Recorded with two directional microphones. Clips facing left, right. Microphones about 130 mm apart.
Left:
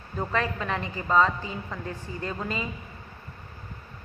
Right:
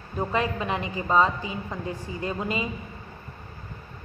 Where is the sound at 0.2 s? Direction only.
15° right (ahead or behind).